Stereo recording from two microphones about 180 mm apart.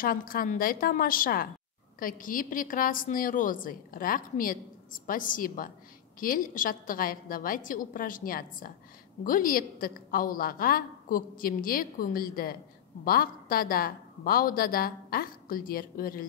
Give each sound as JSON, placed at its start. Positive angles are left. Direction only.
{"t": 0.0, "sound": "a woman's voice", "side_deg": 50}